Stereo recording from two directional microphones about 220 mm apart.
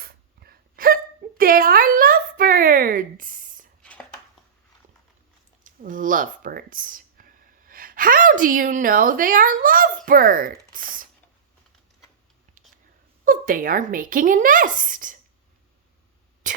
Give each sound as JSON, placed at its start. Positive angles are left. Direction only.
{"t": 0.0, "sound": "a sound", "side_deg": -45}
{"t": 5.6, "sound": "speech", "side_deg": -35}
{"t": 13.2, "sound": "speech", "side_deg": -40}
{"t": 16.4, "sound": "speech", "side_deg": -35}